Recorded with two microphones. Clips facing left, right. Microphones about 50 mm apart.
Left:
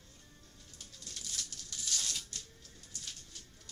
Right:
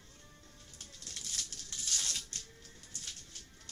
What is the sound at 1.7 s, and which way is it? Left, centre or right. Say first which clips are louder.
Music: even; right.